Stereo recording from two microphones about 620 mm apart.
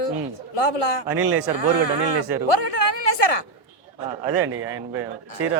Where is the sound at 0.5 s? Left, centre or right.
Left.